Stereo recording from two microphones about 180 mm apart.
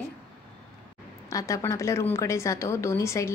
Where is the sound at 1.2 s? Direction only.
20° left (ahead or behind).